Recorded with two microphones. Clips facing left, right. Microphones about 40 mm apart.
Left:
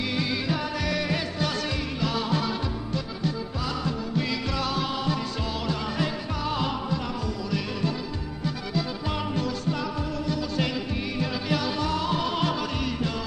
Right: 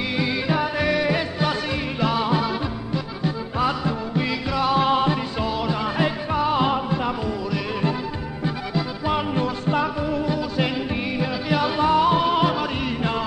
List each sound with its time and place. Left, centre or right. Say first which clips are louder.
0.1 s music: right 5 dB; centre
4.7 s music: right 8 dB; right
5.4 s music: right 6 dB; centre
8.5 s music: right 3 dB; right